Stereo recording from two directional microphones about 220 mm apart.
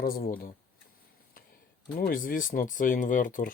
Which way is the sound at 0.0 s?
40° left (ahead or behind).